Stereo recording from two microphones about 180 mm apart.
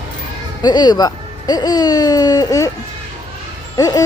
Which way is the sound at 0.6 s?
25° left (ahead or behind).